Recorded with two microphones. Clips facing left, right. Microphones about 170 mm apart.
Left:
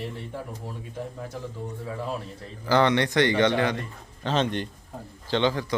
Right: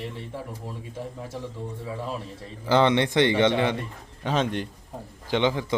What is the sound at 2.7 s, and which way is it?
Speech, 20° right (ahead or behind).